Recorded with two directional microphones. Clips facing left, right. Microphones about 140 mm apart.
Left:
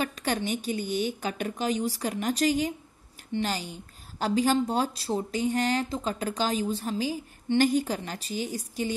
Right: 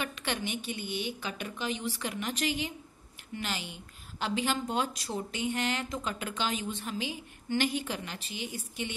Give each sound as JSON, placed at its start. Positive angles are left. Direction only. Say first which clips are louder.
{"t": 0.0, "sound": "a woman's voice", "louder": "left 6 dB", "side_deg": 40}